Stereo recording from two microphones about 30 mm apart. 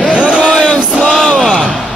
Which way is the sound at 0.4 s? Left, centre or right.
Left.